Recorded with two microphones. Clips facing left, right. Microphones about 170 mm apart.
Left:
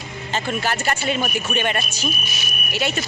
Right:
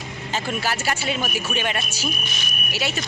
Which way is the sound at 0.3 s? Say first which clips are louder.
Left 2 dB; 5° right (ahead or behind).